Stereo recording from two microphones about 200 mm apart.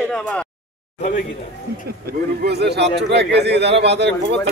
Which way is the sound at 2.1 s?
55° right (ahead or behind).